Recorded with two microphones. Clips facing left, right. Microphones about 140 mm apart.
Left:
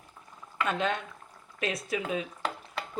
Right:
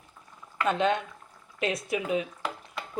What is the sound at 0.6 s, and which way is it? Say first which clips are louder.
Speech: right 5 dB; 20° right (ahead or behind).